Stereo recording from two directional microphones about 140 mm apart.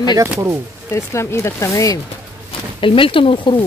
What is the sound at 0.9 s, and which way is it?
Speech, 20° left (ahead or behind).